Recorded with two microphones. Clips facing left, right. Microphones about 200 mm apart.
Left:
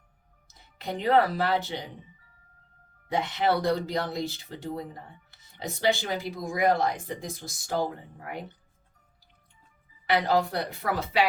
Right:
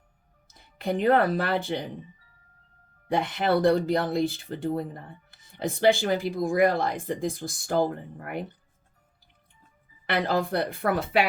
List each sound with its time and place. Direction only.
0.4 s speech: 50° right (ahead or behind)
3.1 s speech: 55° right (ahead or behind)
10.1 s speech: 55° right (ahead or behind)